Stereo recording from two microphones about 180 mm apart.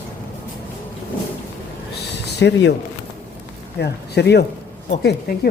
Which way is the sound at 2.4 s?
75° left (ahead or behind).